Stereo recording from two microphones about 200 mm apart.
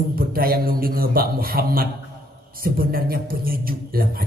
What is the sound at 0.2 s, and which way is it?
Speech, 45° right (ahead or behind).